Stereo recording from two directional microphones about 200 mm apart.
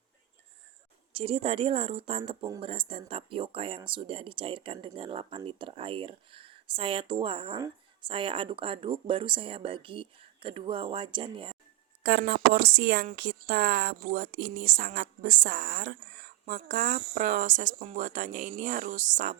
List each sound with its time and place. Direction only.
1.1 s speech: 30° right (ahead or behind)
12.0 s speech: 50° right (ahead or behind)